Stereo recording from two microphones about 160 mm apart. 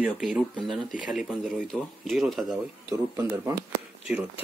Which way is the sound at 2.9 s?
15° right (ahead or behind).